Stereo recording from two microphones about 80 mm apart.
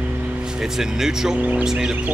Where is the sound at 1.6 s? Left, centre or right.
Centre.